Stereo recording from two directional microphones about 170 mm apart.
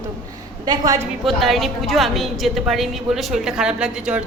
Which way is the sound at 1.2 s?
Centre (ahead or behind).